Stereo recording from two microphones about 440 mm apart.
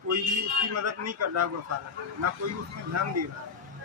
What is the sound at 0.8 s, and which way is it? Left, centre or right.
Speech, right.